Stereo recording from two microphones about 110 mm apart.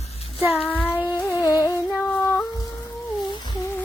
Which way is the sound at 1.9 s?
Centre (ahead or behind).